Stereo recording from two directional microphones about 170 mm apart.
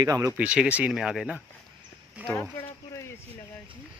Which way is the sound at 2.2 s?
10° right (ahead or behind).